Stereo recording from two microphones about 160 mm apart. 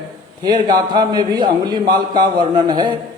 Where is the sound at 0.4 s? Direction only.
25° right (ahead or behind).